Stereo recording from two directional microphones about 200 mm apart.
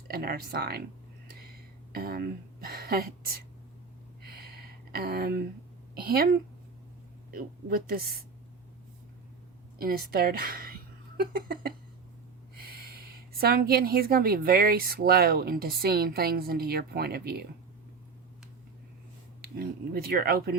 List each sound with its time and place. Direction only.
0.1 s a woman's voice: 50° right (ahead or behind)
1.9 s a woman's voice: 50° right (ahead or behind)
4.9 s a woman's voice: 50° right (ahead or behind)
9.7 s a woman's voice: 50° right (ahead or behind)
13.4 s a woman's voice: 50° right (ahead or behind)
19.4 s a woman's voice: 50° right (ahead or behind)